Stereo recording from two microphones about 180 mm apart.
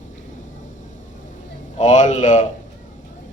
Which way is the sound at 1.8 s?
40° left (ahead or behind).